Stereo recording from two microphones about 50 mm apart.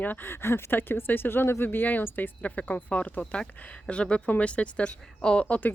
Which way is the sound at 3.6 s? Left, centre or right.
Left.